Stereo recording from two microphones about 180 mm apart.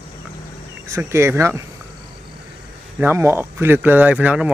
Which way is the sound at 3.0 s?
15° right (ahead or behind).